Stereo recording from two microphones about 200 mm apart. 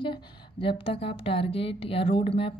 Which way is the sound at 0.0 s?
25° left (ahead or behind).